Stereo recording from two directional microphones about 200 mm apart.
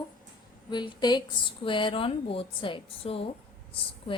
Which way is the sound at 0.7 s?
20° left (ahead or behind).